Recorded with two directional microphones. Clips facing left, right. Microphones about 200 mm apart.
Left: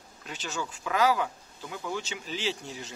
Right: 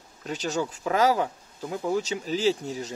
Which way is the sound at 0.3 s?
40° right (ahead or behind).